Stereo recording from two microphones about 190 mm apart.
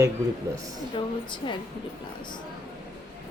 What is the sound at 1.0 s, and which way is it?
Speech, 25° left (ahead or behind).